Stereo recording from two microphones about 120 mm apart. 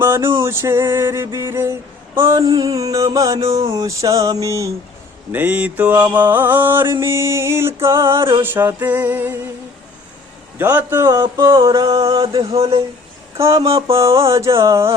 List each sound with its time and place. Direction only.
0.0 s a sound: 20° right (ahead or behind)
0.4 s music: 20° right (ahead or behind)
5.3 s mantra: 15° right (ahead or behind)
7.0 s music: 20° right (ahead or behind)
8.4 s mantra: 20° right (ahead or behind)
10.6 s music: 15° right (ahead or behind)
12.1 s a sound: 40° right (ahead or behind)
13.4 s music: 25° right (ahead or behind)
13.7 s a sound: 50° right (ahead or behind)
13.9 s music: 25° right (ahead or behind)